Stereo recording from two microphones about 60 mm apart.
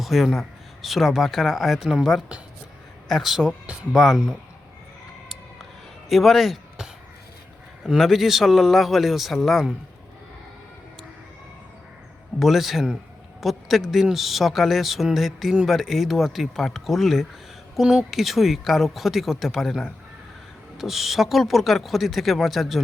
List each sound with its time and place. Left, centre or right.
0.0 s speech: centre
3.1 s speech: centre
6.1 s speech: centre
7.9 s speech: centre
12.4 s speech: centre